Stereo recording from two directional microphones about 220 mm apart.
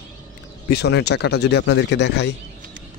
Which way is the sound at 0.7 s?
50° left (ahead or behind).